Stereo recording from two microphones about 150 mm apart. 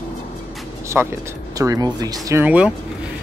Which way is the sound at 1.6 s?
25° right (ahead or behind).